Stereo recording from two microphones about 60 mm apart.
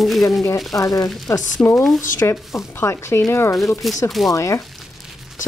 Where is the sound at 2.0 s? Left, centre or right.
Left.